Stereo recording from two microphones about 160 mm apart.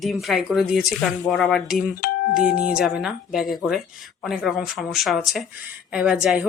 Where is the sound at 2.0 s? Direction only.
60° left (ahead or behind).